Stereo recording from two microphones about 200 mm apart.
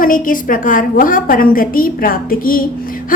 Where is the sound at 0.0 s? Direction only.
45° left (ahead or behind).